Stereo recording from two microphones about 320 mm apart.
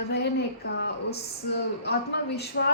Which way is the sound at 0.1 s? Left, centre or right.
Left.